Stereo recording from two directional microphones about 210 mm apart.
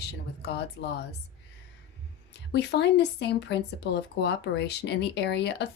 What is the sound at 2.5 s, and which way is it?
Speech, 55° left (ahead or behind).